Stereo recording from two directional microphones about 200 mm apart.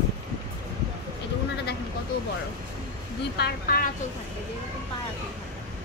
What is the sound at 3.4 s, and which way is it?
Speech, 50° left (ahead or behind).